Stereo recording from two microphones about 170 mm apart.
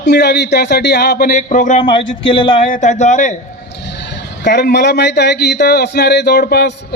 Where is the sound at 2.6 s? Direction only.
50° left (ahead or behind).